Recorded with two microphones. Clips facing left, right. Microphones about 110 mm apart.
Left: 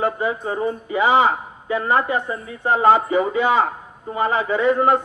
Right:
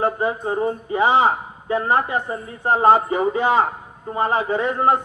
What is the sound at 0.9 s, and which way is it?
A man's voice, 35° right (ahead or behind).